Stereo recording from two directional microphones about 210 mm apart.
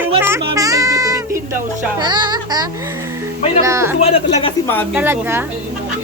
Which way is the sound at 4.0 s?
30° left (ahead or behind).